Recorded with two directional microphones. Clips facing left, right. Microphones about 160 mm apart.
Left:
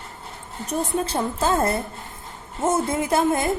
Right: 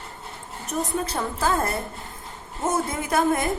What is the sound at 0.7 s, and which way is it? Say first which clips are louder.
A woman's voice: left 2 dB; 30° left (ahead or behind).